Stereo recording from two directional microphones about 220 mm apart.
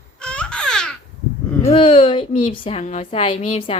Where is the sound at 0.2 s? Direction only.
5° left (ahead or behind).